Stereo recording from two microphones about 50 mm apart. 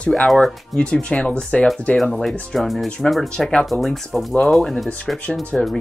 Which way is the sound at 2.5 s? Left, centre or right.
Centre.